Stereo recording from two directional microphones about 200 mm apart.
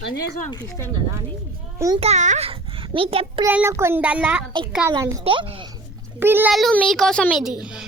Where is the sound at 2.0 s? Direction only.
35° right (ahead or behind).